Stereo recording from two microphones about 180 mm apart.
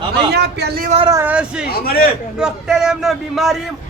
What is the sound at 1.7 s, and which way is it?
Speech, 55° left (ahead or behind).